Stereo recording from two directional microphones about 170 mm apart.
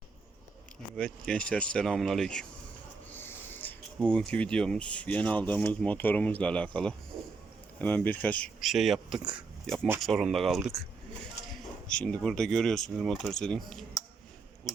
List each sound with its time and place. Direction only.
0.9 s speech: 5° left (ahead or behind)
11.9 s speech: 5° left (ahead or behind)